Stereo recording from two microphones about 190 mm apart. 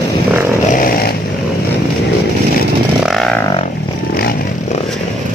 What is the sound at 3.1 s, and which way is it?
Didgeridoo, centre (ahead or behind).